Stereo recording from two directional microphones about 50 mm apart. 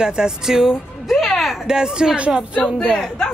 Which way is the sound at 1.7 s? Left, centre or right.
Centre.